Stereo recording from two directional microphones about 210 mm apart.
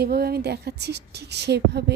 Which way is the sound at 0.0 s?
50° right (ahead or behind).